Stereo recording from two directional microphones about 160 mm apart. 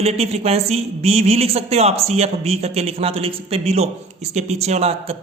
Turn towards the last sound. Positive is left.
turn(degrees=-40)  # may be behind; listen again after turning